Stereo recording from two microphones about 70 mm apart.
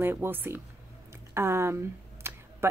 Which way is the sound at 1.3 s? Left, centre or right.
Right.